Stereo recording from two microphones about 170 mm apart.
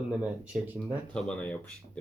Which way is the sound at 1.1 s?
5° left (ahead or behind).